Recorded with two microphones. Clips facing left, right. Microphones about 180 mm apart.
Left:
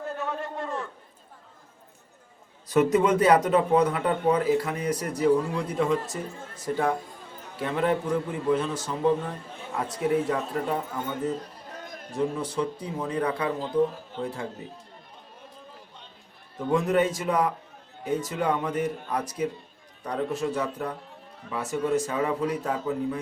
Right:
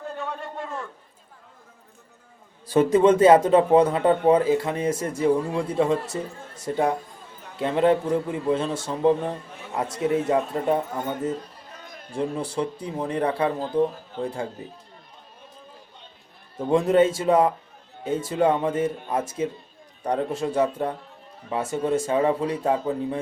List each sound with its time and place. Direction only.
0.2 s a sound: centre (ahead or behind)
2.6 s a man's voice: 30° right (ahead or behind)
12.1 s a man's voice: 30° right (ahead or behind)
16.6 s a man's voice: 30° right (ahead or behind)